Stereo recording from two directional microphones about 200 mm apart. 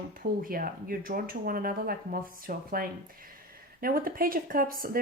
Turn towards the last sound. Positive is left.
turn(degrees=-45)  # may be behind; listen again after turning